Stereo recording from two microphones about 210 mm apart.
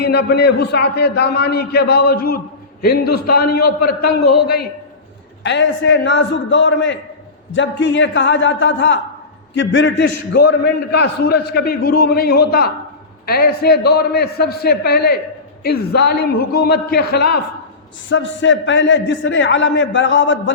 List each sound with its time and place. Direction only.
0.0 s a man's voice: 50° left (ahead or behind)
5.4 s a man's voice: 60° left (ahead or behind)